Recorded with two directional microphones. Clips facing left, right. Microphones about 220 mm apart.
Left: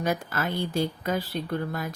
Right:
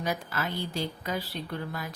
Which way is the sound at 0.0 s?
50° left (ahead or behind).